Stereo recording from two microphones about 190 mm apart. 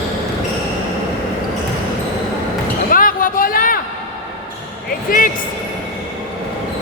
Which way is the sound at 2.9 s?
45° left (ahead or behind).